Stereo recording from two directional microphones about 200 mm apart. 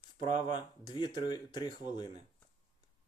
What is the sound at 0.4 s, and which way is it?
Speech, 25° left (ahead or behind).